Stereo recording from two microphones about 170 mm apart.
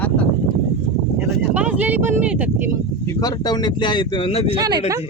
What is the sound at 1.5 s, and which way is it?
Speech, 10° right (ahead or behind).